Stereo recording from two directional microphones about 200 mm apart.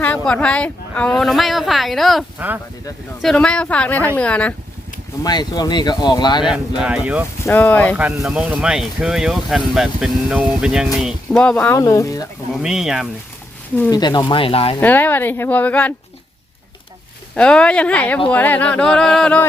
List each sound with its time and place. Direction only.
0.0 s speech: 5° left (ahead or behind)
5.2 s speech: 20° left (ahead or behind)
6.4 s speech: 5° right (ahead or behind)
7.4 s speech: 10° left (ahead or behind)
7.9 s speech: 5° right (ahead or behind); by 12.2 s 15° left (ahead or behind)
12.5 s speech: centre (ahead or behind)
13.9 s speech: 20° left (ahead or behind)
14.8 s speech: 10° left (ahead or behind)
17.3 s speech: 5° left (ahead or behind)